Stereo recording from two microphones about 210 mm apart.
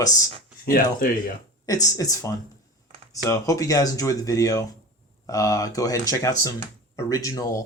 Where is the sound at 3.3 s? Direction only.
15° left (ahead or behind).